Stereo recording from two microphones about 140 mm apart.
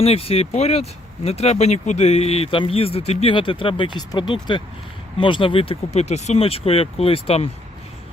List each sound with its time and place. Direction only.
0.0 s speech: 45° left (ahead or behind)